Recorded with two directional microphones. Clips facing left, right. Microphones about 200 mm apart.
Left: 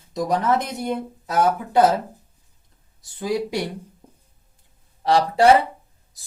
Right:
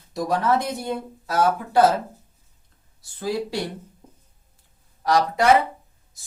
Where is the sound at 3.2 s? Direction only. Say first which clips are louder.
Left 2 dB; 15° left (ahead or behind).